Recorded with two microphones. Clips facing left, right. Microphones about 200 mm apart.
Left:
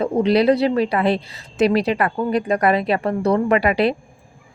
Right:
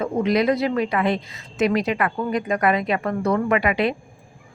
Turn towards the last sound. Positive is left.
turn(degrees=35)  # may be behind; listen again after turning